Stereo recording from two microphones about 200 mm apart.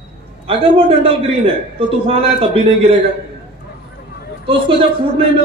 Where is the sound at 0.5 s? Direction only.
25° right (ahead or behind).